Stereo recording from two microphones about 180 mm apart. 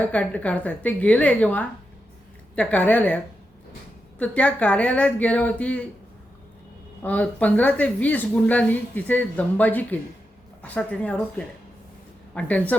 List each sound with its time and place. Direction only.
0.0 s speech: 5° left (ahead or behind)
4.2 s speech: 10° left (ahead or behind)
7.0 s speech: 10° left (ahead or behind)